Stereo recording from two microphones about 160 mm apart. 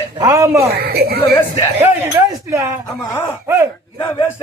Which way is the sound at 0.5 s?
80° right.